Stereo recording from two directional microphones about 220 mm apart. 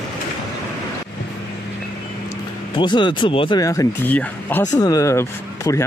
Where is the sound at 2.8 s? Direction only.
20° left (ahead or behind).